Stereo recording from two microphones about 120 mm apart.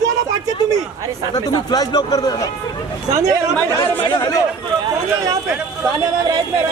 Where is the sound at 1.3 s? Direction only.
35° left (ahead or behind).